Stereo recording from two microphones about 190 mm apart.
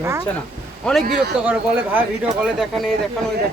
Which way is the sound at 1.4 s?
10° right (ahead or behind).